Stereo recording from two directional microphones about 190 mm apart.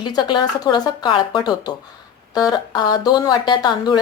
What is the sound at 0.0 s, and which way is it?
A woman's voice, 25° left (ahead or behind).